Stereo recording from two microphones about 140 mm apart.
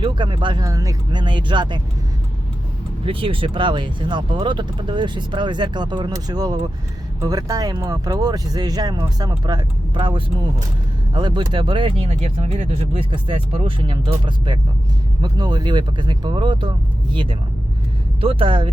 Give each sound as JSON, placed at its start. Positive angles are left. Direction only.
{"t": 0.0, "sound": "speech", "side_deg": -35}
{"t": 0.7, "sound": "speech", "side_deg": -25}
{"t": 3.1, "sound": "speech", "side_deg": -40}
{"t": 18.2, "sound": "speech", "side_deg": -40}